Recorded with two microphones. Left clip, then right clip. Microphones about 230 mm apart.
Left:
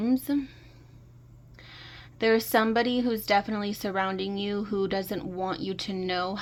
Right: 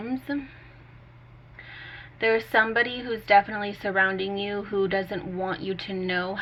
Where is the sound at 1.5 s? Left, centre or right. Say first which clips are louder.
Right 5 dB; left.